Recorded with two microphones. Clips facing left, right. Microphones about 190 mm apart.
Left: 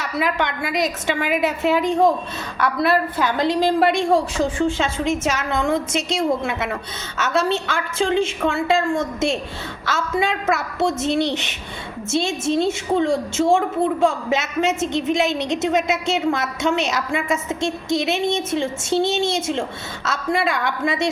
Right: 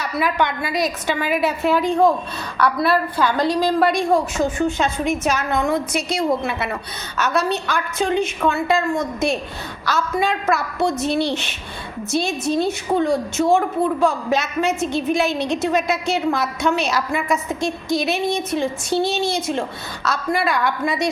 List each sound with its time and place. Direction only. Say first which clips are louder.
0.0 s a woman's voice: right 1 dB; 20° left (ahead or behind)